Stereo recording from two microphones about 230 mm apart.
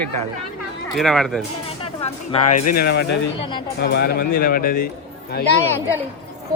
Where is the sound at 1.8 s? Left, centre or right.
Left.